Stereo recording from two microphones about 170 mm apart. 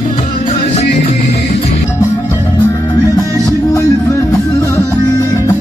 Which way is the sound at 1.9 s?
15° left (ahead or behind).